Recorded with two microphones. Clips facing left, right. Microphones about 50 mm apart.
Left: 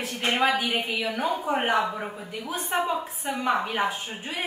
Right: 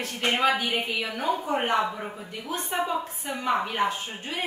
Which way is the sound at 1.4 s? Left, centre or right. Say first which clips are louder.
Left 2 dB; centre.